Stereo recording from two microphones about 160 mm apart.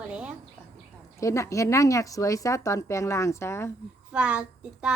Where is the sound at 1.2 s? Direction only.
20° left (ahead or behind).